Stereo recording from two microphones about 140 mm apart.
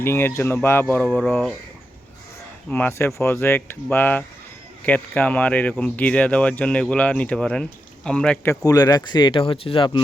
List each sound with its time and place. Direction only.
0.0 s speech: 15° left (ahead or behind)
2.6 s speech: 10° left (ahead or behind)
8.4 s speech: 25° left (ahead or behind)